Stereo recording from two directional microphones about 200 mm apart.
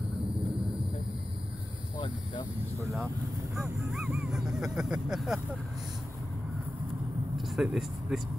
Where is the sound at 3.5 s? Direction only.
5° right (ahead or behind).